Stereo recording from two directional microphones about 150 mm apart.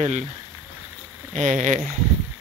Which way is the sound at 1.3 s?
55° right (ahead or behind).